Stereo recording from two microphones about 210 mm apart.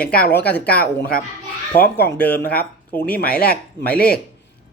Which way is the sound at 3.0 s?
45° left (ahead or behind).